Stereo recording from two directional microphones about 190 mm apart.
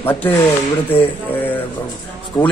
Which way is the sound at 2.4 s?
20° left (ahead or behind).